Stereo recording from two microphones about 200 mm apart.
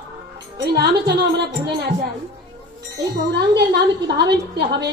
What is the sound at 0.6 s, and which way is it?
A woman's voice, 55° right (ahead or behind).